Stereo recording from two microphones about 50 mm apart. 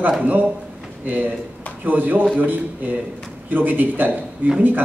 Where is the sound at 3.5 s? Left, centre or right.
Right.